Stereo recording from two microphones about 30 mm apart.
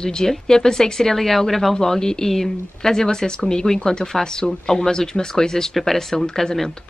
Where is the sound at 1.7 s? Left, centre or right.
Centre.